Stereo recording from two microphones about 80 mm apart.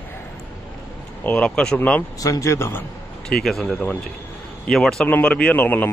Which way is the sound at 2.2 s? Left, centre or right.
Left.